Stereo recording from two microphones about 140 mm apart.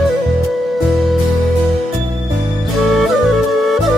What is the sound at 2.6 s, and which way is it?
Music, centre (ahead or behind).